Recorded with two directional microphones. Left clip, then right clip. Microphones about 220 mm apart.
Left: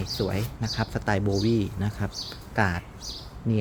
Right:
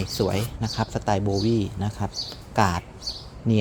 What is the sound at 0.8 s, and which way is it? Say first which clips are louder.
A man's voice: right 3 dB; centre (ahead or behind).